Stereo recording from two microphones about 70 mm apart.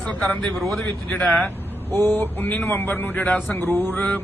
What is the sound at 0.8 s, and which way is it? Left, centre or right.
Speech, left.